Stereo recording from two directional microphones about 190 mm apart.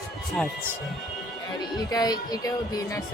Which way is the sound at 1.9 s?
20° left (ahead or behind).